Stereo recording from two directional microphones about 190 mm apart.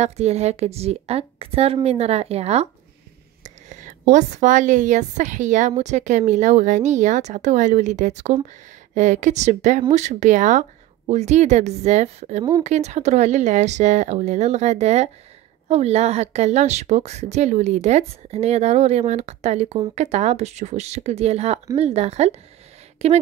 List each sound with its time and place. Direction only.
0.0 s a woman's voice: 35° right (ahead or behind)